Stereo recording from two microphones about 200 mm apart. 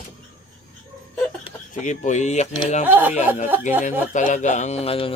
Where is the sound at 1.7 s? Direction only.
40° left (ahead or behind).